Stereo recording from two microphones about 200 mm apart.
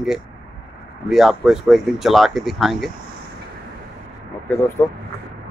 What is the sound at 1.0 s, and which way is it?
Speech, centre (ahead or behind).